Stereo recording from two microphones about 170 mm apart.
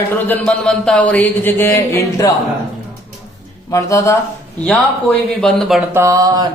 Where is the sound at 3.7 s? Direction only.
20° left (ahead or behind).